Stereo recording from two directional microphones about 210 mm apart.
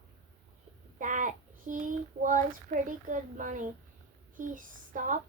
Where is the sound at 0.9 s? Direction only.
40° right (ahead or behind).